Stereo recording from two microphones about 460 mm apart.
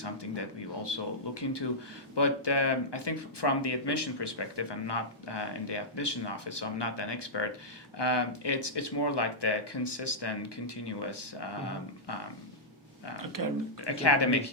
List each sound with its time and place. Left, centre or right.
0.0 s speech: left
13.4 s speech: right
13.8 s speech: left